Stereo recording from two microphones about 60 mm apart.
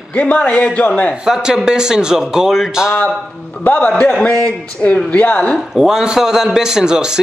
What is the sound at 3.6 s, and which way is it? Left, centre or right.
Speech, left.